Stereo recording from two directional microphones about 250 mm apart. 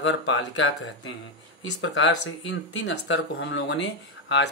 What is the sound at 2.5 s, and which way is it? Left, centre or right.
Speech, left.